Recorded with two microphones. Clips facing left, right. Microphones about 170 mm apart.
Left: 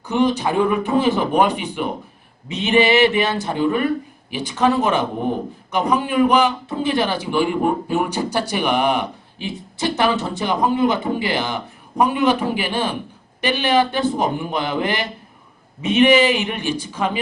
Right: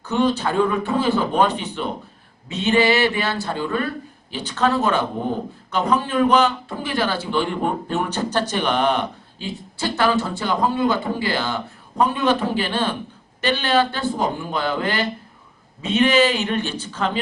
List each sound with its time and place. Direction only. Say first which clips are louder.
0.0 s a man's voice: left 2 dB; 15° left (ahead or behind)